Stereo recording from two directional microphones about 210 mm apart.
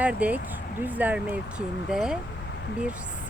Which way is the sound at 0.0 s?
5° right (ahead or behind).